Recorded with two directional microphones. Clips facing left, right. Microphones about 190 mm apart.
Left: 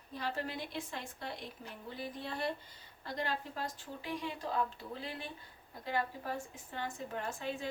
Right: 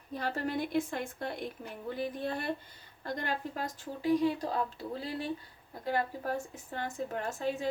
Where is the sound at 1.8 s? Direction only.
50° right (ahead or behind).